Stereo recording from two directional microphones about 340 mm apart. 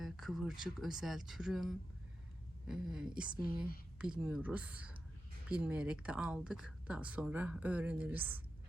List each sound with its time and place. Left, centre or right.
0.0 s a woman's voice: centre